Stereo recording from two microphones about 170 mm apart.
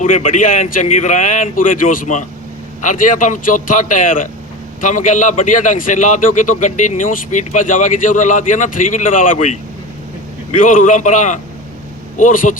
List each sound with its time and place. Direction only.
0.0 s a man's voice: 50° left (ahead or behind)
10.6 s a man's voice: 50° left (ahead or behind)